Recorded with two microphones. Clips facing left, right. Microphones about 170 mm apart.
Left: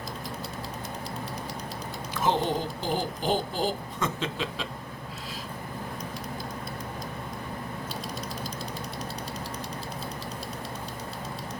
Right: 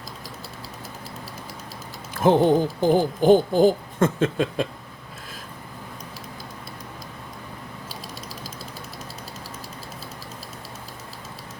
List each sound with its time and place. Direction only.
2.2 s speech: 50° right (ahead or behind)